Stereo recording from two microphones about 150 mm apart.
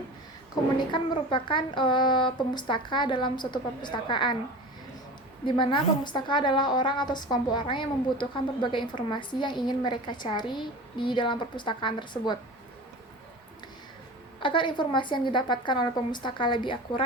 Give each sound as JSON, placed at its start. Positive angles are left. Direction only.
{"t": 0.9, "sound": "a woman's voice", "side_deg": 30}
{"t": 5.5, "sound": "a woman's voice", "side_deg": 30}
{"t": 14.4, "sound": "a woman's voice", "side_deg": 35}